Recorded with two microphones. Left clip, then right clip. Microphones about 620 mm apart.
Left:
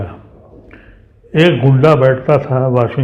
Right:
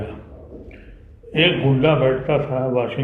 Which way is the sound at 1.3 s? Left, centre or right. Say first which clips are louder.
Left 5 dB; left.